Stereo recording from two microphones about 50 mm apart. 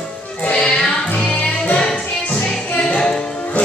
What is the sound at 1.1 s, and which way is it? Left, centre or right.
Music, left.